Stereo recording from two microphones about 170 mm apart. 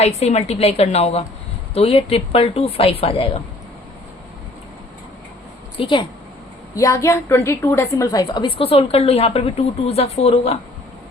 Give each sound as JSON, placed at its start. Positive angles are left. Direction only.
{"t": 0.0, "sound": "a woman's voice", "side_deg": 40}
{"t": 5.7, "sound": "a woman's voice", "side_deg": 30}
{"t": 6.7, "sound": "a woman's voice", "side_deg": 20}